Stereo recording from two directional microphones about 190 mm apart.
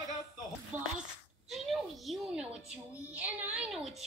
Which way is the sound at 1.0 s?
Centre (ahead or behind).